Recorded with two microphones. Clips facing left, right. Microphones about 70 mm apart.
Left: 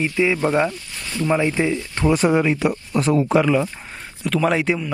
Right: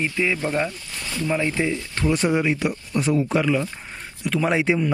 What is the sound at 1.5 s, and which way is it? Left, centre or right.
A man's voice, centre.